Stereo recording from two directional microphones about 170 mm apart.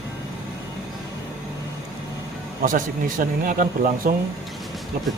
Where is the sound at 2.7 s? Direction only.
55° right (ahead or behind).